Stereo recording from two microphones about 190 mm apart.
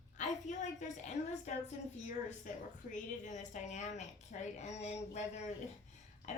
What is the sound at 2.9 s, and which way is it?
A woman's voice, 40° left (ahead or behind).